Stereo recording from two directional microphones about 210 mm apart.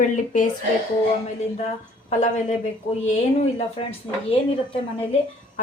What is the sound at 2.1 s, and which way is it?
Speech, 35° left (ahead or behind).